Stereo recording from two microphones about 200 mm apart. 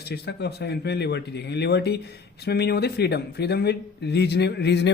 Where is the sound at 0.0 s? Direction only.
55° left (ahead or behind).